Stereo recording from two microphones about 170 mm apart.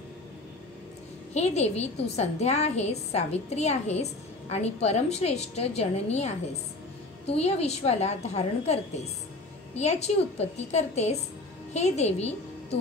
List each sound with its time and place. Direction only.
1.3 s a woman's voice: 40° left (ahead or behind)